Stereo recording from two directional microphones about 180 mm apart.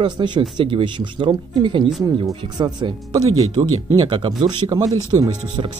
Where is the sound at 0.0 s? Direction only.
25° right (ahead or behind).